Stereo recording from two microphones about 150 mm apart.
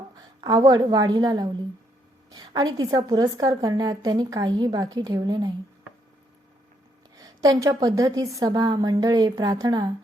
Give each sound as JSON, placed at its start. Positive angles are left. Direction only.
{"t": 0.4, "sound": "a woman's voice", "side_deg": -25}
{"t": 7.2, "sound": "a woman's voice", "side_deg": -25}